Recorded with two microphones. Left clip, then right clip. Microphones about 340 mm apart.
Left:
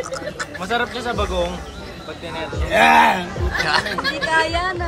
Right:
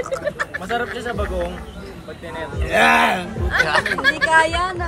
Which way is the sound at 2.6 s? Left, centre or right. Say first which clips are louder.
Left 2 dB; centre.